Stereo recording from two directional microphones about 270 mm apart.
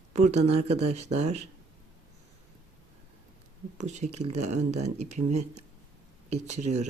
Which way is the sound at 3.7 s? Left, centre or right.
Right.